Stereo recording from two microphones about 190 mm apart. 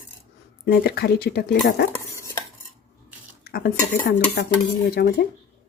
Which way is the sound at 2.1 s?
15° left (ahead or behind).